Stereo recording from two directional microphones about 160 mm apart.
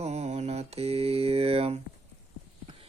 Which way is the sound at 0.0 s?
45° right (ahead or behind).